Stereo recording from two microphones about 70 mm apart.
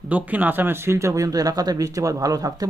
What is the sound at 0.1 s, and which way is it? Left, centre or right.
Speech, right.